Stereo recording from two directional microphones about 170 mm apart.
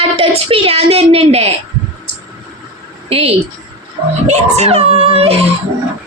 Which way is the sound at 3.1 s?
35° right (ahead or behind).